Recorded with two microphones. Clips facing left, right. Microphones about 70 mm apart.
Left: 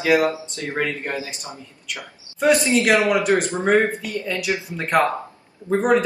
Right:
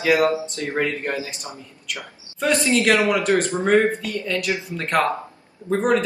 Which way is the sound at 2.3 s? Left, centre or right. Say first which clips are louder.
Left 2 dB; centre.